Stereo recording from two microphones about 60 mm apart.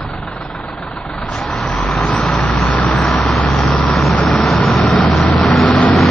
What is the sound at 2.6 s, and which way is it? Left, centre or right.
Vehicle, left.